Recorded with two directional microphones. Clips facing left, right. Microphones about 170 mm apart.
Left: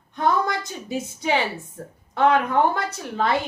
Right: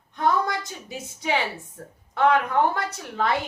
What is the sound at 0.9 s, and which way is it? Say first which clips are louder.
Speech: left 4 dB; 30° left (ahead or behind).